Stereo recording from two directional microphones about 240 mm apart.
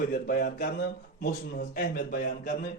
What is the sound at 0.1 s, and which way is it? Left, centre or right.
Speech, left.